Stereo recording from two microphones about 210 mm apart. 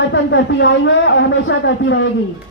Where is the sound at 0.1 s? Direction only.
60° left (ahead or behind).